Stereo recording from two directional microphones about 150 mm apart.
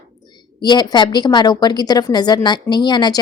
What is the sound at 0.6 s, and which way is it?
A woman's voice, 30° left (ahead or behind).